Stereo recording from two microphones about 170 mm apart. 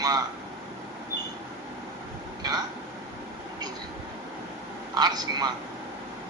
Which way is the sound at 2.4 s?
25° right (ahead or behind).